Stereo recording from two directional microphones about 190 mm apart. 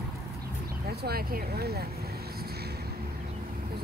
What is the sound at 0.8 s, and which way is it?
Speech, 55° right (ahead or behind).